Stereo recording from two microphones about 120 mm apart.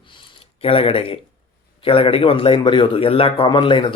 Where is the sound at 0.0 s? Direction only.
45° left (ahead or behind).